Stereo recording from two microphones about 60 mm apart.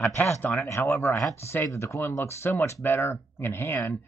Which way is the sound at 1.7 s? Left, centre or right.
Left.